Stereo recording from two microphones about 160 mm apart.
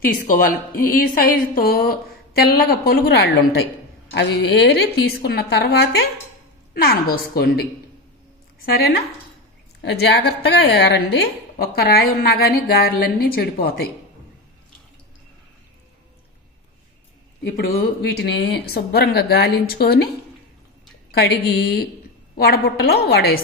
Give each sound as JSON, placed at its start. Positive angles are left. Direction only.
{"t": 0.3, "sound": "a woman's voice", "side_deg": 60}
{"t": 6.7, "sound": "a woman's voice", "side_deg": 75}
{"t": 8.7, "sound": "speech", "side_deg": 80}
{"t": 9.8, "sound": "a woman's voice", "side_deg": 90}
{"t": 18.2, "sound": "speech", "side_deg": 90}
{"t": 21.1, "sound": "a woman's voice", "side_deg": 90}